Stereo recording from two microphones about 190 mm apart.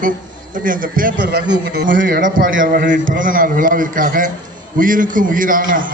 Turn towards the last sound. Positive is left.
turn(degrees=-45)  # may be behind; listen again after turning